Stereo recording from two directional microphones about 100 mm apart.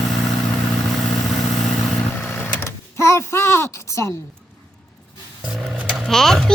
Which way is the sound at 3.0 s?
25° left (ahead or behind).